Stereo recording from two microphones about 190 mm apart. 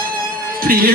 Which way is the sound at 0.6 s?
50° right (ahead or behind).